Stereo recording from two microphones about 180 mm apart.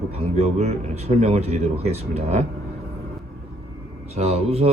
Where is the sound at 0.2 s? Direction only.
35° right (ahead or behind).